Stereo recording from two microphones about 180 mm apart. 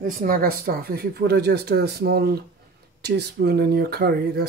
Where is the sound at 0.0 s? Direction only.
50° right (ahead or behind).